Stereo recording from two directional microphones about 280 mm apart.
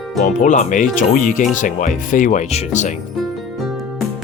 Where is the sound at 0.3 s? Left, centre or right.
Left.